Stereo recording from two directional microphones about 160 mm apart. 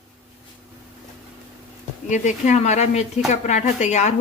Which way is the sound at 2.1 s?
50° left (ahead or behind).